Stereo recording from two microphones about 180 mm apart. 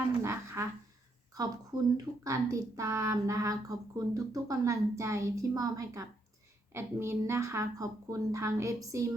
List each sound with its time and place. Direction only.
0.2 s speech: 15° right (ahead or behind)
1.7 s speech: 25° right (ahead or behind)